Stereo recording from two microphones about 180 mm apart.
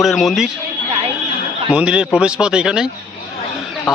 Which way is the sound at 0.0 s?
Centre (ahead or behind).